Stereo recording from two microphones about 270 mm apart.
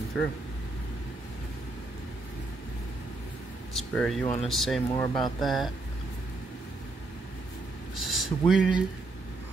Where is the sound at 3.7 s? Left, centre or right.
Centre.